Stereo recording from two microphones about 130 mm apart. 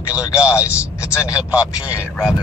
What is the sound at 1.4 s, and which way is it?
Speech, 10° right (ahead or behind).